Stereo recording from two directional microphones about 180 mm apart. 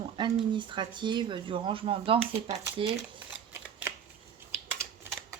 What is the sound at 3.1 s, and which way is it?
Shuffling cards, 10° right (ahead or behind).